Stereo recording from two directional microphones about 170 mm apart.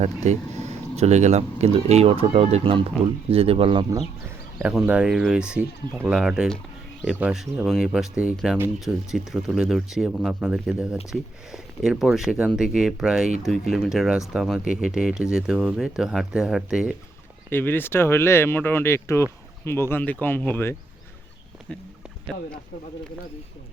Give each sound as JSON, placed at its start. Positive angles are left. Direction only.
{"t": 0.0, "sound": "speech", "side_deg": -40}
{"t": 4.6, "sound": "speech", "side_deg": -5}
{"t": 17.5, "sound": "speech", "side_deg": 10}